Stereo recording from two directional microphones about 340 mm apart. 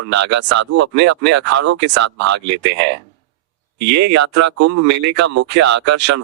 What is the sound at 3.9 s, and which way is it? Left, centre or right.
Speech, right.